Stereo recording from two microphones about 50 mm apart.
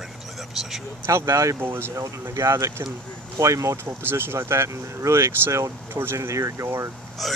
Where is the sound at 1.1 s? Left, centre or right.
Right.